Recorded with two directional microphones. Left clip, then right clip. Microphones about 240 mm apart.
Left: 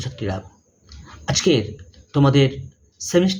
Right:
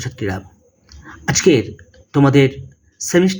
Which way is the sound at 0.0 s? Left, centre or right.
Centre.